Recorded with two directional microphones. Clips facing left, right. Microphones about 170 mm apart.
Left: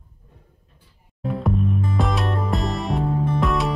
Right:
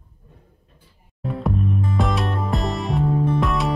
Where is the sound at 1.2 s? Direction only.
Centre (ahead or behind).